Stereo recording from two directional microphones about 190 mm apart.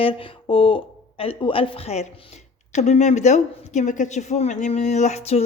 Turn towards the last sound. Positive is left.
turn(degrees=35)  # may be behind; listen again after turning